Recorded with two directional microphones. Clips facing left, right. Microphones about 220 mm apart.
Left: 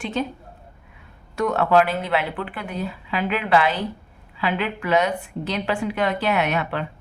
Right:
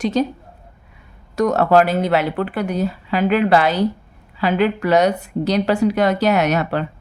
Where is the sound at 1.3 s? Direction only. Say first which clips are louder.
Right 4 dB; 40° right (ahead or behind).